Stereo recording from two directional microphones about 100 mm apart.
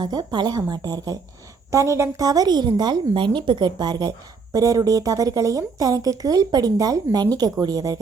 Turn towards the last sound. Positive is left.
turn(degrees=-40)  # may be behind; listen again after turning